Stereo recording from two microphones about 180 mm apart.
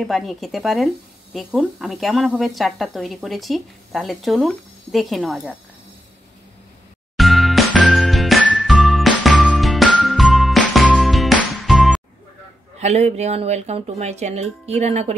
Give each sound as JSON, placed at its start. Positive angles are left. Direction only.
{"t": 0.0, "sound": "speech", "side_deg": 0}
{"t": 7.2, "sound": "music", "side_deg": 0}
{"t": 12.8, "sound": "speech", "side_deg": -35}